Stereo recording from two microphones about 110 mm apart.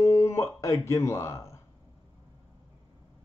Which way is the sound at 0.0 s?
25° left (ahead or behind).